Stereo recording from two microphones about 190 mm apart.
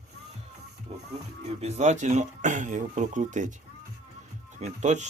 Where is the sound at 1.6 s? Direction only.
40° right (ahead or behind).